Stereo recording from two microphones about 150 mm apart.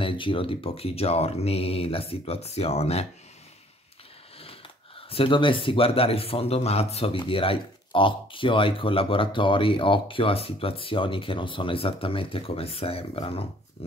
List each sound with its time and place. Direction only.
0.0 s speech: 35° left (ahead or behind)
4.4 s speech: 40° left (ahead or behind)